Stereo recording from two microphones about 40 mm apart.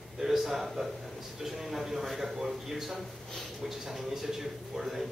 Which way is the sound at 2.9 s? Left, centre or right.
Centre.